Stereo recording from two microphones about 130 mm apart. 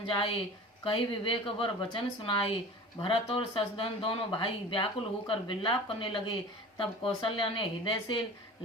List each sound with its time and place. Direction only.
0.0 s speech: 45° left (ahead or behind)